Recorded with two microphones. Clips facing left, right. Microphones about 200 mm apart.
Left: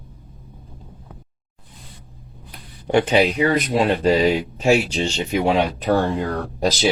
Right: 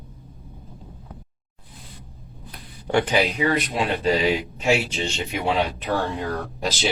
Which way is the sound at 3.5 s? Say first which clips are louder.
Left 5 dB; 40° left (ahead or behind).